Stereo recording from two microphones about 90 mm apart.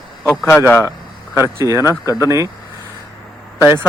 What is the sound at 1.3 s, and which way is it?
Speech, 30° right (ahead or behind).